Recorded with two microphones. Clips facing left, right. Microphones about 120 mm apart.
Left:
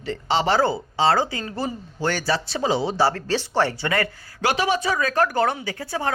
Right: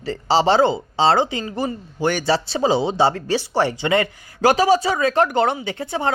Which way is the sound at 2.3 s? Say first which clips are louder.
Right 5 dB; 30° right (ahead or behind).